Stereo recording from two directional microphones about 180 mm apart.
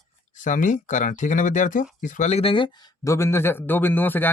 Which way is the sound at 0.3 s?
45° left (ahead or behind).